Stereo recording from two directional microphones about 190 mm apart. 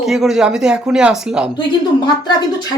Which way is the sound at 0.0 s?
Centre (ahead or behind).